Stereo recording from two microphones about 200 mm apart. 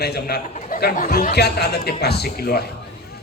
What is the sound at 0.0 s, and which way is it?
A man's voice, 55° left (ahead or behind).